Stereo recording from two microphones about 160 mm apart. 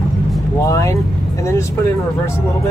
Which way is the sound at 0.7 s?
20° left (ahead or behind).